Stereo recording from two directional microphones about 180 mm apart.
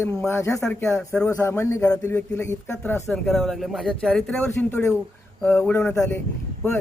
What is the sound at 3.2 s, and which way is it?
Speech, centre (ahead or behind).